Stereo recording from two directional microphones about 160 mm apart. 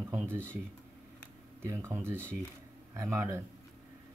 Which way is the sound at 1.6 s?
15° right (ahead or behind).